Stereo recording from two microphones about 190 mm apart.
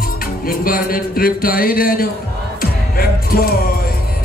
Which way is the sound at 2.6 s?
50° left (ahead or behind).